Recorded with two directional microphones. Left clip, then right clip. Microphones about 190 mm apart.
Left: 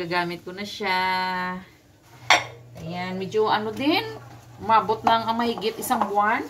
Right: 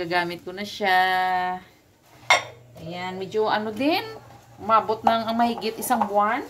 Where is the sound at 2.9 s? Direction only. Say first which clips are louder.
Left 1 dB; 25° right (ahead or behind).